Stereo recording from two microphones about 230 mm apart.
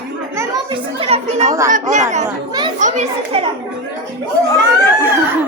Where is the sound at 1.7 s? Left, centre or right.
Right.